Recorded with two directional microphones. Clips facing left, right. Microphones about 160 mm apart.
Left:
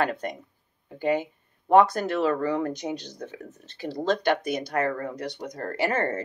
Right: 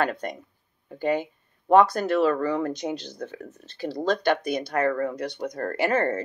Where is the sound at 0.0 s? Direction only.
20° left (ahead or behind).